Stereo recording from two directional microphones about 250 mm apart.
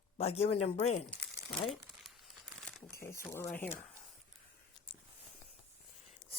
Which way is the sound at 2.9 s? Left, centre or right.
Centre.